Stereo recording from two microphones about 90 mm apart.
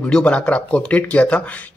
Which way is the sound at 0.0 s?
15° left (ahead or behind).